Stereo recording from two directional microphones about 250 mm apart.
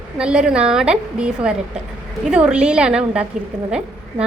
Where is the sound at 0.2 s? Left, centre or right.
Centre.